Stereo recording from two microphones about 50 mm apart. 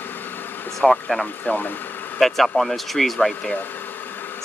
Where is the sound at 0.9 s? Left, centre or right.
Centre.